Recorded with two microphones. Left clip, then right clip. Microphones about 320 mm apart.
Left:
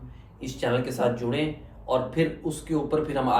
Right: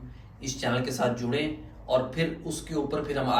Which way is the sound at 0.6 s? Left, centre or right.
Centre.